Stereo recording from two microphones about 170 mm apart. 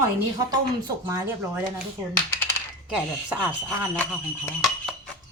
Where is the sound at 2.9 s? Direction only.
10° right (ahead or behind).